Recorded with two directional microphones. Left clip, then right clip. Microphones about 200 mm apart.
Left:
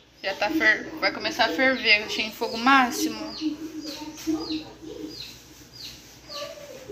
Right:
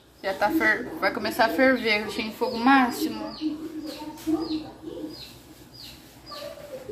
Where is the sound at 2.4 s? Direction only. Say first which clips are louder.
Left 1 dB; 5° right (ahead or behind).